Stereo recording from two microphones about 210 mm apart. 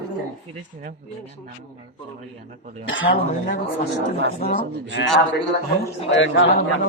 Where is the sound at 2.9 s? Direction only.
60° left (ahead or behind).